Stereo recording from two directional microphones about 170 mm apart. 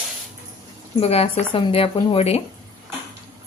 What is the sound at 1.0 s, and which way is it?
Speech, 35° left (ahead or behind).